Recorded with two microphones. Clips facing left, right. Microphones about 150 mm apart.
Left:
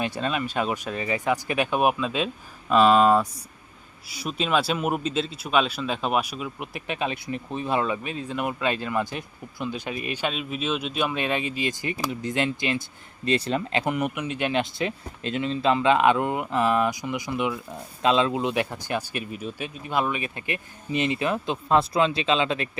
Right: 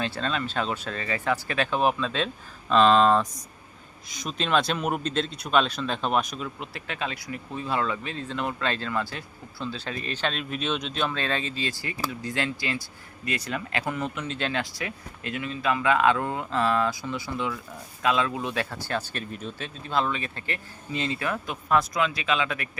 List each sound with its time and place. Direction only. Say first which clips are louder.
0.0 s speech: left 2 dB; 15° left (ahead or behind)
13.8 s speech: left 4 dB; 15° left (ahead or behind)